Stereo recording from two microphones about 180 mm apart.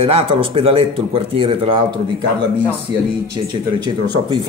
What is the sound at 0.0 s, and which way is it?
A man's voice, 30° right (ahead or behind).